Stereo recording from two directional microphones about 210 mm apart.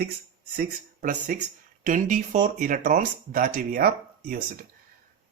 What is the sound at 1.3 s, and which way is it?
Speech, 40° right (ahead or behind).